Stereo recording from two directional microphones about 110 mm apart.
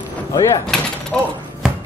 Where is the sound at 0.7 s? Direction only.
5° left (ahead or behind).